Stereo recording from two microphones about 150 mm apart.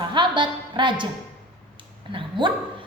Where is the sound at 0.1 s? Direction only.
30° right (ahead or behind).